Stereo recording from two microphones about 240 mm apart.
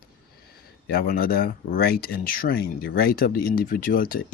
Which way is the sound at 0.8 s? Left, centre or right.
Left.